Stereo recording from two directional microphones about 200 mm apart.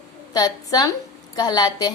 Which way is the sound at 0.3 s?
20° left (ahead or behind).